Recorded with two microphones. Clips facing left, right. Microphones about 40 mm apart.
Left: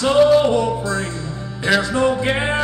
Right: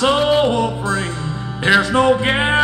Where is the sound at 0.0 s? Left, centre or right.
Right.